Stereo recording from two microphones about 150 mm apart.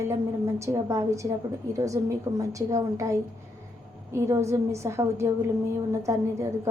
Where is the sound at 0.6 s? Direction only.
20° right (ahead or behind).